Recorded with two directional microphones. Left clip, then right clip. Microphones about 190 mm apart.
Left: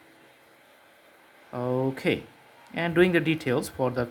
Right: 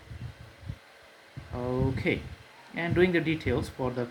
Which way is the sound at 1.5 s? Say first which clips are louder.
Left 4 dB; 40° left (ahead or behind).